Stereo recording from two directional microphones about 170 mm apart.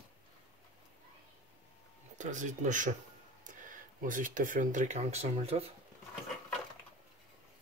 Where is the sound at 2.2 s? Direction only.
45° right (ahead or behind).